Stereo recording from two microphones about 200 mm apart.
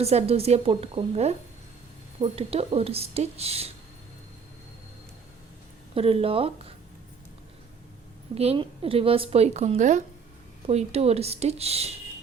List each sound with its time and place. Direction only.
0.0 s a woman's voice: 30° right (ahead or behind)
5.9 s speech: 30° right (ahead or behind)
8.4 s a woman's voice: 30° right (ahead or behind)